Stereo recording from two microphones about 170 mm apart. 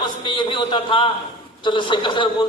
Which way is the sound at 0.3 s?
30° left (ahead or behind).